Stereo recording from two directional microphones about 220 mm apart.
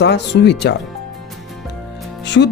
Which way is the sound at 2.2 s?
50° left (ahead or behind).